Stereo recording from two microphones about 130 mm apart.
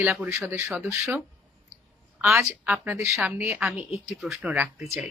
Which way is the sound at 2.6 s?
15° right (ahead or behind).